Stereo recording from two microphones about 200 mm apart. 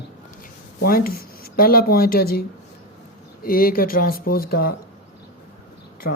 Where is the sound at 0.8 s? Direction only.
45° left (ahead or behind).